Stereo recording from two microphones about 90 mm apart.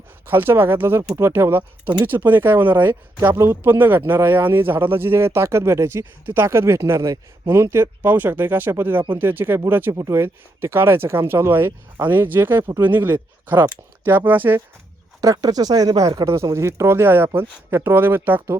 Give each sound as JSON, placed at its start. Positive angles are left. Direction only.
{"t": 0.3, "sound": "speech", "side_deg": -25}
{"t": 9.9, "sound": "speech", "side_deg": -35}
{"t": 15.2, "sound": "speech", "side_deg": -45}